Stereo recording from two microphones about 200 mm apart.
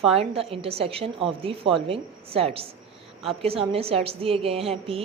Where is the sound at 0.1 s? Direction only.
30° right (ahead or behind).